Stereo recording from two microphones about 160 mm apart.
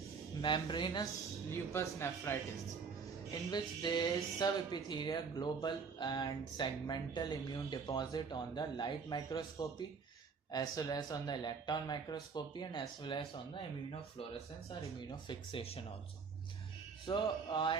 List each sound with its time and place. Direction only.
0.4 s speech: 30° left (ahead or behind)
1.5 s a man's voice: 15° left (ahead or behind)
3.5 s speech: 30° left (ahead or behind)
14.7 s speech: 30° left (ahead or behind)
17.1 s speech: 30° left (ahead or behind)